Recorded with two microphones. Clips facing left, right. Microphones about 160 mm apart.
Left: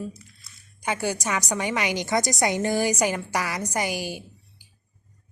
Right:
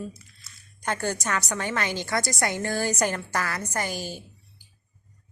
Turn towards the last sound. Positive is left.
turn(degrees=15)  # may be behind; listen again after turning